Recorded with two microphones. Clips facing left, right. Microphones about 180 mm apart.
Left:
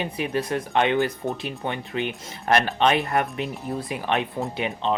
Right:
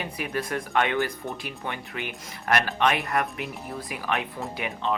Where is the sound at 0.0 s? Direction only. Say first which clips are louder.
Left 4 dB; 25° left (ahead or behind).